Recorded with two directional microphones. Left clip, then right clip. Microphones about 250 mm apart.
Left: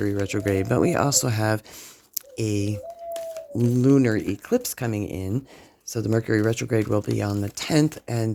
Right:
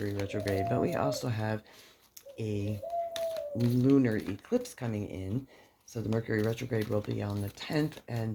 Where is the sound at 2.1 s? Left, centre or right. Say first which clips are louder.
Left 10 dB; left.